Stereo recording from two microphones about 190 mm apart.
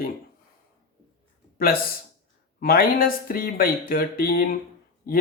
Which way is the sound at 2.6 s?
50° left (ahead or behind).